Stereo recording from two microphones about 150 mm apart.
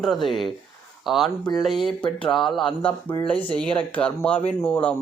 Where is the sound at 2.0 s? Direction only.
35° left (ahead or behind).